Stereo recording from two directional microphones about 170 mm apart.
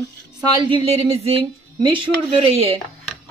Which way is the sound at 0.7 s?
35° right (ahead or behind).